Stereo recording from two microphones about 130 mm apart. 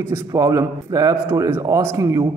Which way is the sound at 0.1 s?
25° right (ahead or behind).